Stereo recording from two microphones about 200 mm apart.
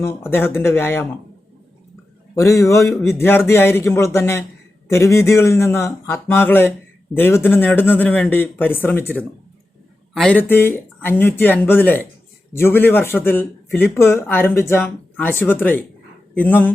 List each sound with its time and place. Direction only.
0.0 s speech: 10° left (ahead or behind)
2.3 s speech: 15° left (ahead or behind)